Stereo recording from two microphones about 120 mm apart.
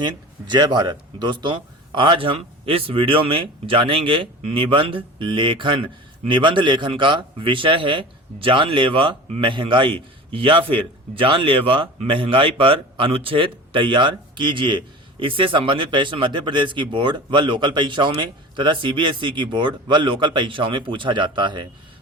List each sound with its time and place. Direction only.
0.0 s speech: 40° right (ahead or behind)